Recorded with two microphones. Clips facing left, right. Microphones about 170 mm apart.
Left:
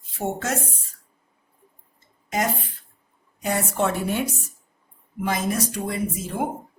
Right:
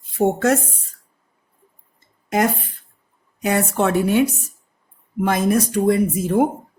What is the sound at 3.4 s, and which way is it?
Speech, 65° right (ahead or behind).